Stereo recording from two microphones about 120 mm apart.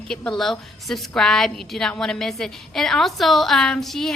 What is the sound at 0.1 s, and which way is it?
A woman's voice, 5° left (ahead or behind).